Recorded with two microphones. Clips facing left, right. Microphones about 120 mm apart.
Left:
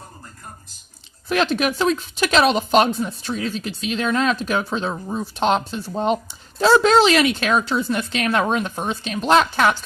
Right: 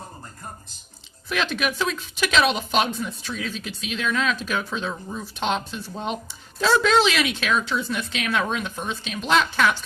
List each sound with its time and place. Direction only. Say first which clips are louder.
1.3 s a woman's voice: left 6 dB; 40° left (ahead or behind)